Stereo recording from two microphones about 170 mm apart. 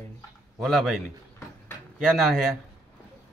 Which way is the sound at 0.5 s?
Centre (ahead or behind).